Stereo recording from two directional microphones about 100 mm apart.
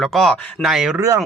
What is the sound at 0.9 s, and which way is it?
Speech, 35° right (ahead or behind).